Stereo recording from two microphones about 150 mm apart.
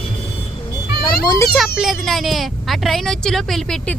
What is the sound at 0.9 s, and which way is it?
Children playing, 90° left.